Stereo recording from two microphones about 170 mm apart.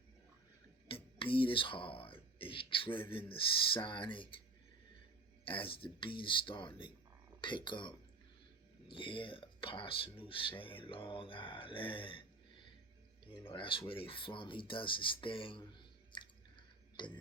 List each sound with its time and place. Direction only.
0.9 s speech: 30° left (ahead or behind)
5.5 s speech: 30° left (ahead or behind)
16.1 s drip: 25° left (ahead or behind)